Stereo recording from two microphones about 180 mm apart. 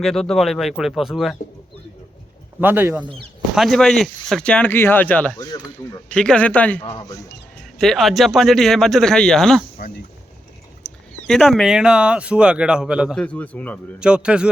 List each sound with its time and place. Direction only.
0.0 s speech: centre (ahead or behind)
2.6 s speech: 10° right (ahead or behind); by 5.4 s 10° left (ahead or behind)
5.4 s speech: 20° left (ahead or behind)
6.1 s speech: 5° left (ahead or behind)
6.8 s speech: 25° left (ahead or behind)
7.8 s speech: centre (ahead or behind)
9.7 s a sound: 55° left (ahead or behind)
10.8 s speech: 5° left (ahead or behind)
14.0 s speech: 5° right (ahead or behind)